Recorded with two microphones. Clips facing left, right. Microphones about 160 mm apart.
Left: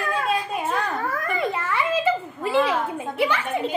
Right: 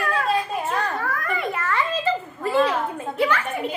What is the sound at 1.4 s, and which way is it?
A woman's voice, 15° left (ahead or behind).